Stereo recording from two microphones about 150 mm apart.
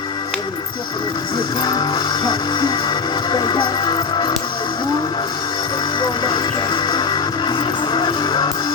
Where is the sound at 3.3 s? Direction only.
30° left (ahead or behind).